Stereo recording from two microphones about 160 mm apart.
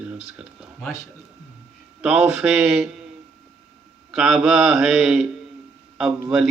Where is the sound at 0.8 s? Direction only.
15° left (ahead or behind).